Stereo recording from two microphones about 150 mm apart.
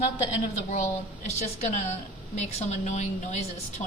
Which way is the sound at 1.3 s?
50° left (ahead or behind).